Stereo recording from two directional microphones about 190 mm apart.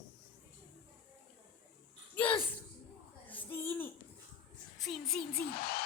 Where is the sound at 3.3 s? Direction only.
10° left (ahead or behind).